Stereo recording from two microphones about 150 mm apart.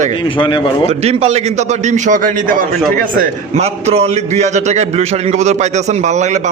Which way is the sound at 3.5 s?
45° right (ahead or behind).